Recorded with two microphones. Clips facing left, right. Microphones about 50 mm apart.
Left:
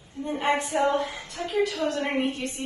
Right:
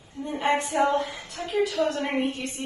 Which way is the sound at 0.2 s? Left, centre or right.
Centre.